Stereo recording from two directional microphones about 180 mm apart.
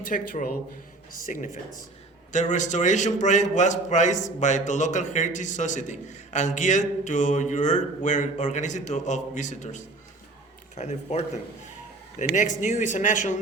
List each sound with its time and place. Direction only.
0.0 s a man's voice: 50° left (ahead or behind)
12.3 s a man's voice: 45° left (ahead or behind)